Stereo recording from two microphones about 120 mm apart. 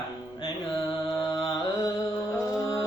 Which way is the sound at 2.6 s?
30° left (ahead or behind).